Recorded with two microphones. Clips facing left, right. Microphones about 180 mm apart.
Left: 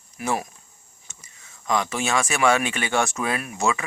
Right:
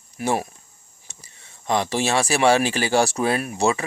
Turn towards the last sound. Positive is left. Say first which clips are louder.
# right 4 dB
turn(degrees=-35)  # may be behind; listen again after turning